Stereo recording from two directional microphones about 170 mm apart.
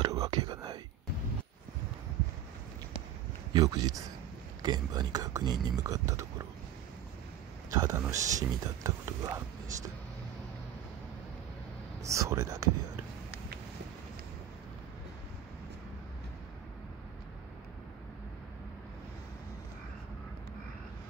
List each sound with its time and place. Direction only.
0.0 s whispering: 25° right (ahead or behind)
3.5 s speech: 25° right (ahead or behind)
7.7 s speech: 20° right (ahead or behind)
12.0 s speech: 20° right (ahead or behind)